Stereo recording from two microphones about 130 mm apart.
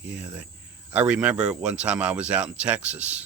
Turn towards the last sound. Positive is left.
turn(degrees=-10)  # may be behind; listen again after turning